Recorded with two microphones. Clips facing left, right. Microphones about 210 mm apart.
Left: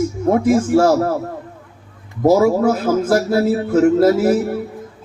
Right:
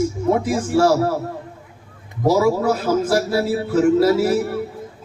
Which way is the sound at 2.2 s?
50° left (ahead or behind).